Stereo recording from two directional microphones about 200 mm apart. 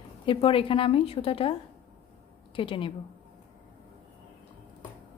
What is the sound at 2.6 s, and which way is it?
Speech, 25° left (ahead or behind).